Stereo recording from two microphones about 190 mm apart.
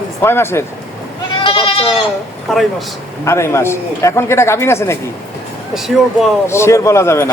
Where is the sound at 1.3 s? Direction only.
25° left (ahead or behind).